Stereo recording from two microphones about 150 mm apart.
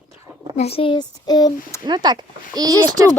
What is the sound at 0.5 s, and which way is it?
Speech, 45° left (ahead or behind).